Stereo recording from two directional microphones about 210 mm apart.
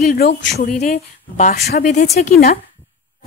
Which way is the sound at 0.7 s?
35° left (ahead or behind).